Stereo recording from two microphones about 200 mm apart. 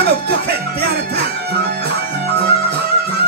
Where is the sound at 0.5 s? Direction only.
50° right (ahead or behind).